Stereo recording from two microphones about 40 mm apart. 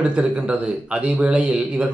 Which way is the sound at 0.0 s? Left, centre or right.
Right.